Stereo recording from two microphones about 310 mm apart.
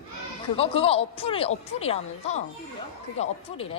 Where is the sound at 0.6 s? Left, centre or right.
Centre.